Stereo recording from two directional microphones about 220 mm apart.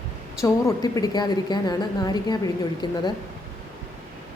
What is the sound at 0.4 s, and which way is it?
A woman's voice, 15° left (ahead or behind).